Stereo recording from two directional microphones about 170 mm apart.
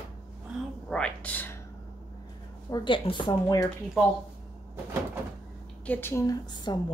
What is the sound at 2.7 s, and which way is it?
Speech, 30° left (ahead or behind).